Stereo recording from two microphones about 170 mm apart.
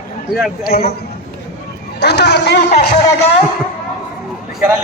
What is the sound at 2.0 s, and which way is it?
Speech, 80° left.